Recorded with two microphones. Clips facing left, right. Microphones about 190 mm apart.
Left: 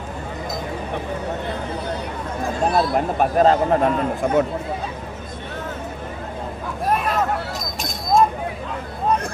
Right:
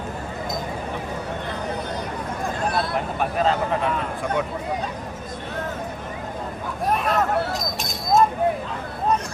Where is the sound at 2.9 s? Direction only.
45° left (ahead or behind).